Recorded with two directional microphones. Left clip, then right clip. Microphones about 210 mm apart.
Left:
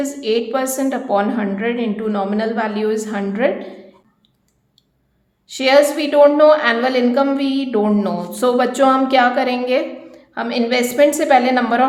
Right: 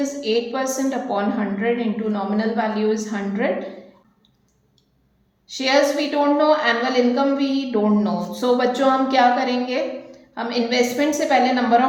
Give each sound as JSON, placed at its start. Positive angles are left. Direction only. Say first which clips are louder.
{"t": 0.0, "sound": "a woman's voice", "louder": "left 3 dB", "side_deg": 45}
{"t": 5.5, "sound": "a woman's voice", "louder": "left 5 dB", "side_deg": 45}